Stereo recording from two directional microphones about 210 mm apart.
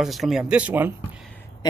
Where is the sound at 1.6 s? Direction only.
20° left (ahead or behind).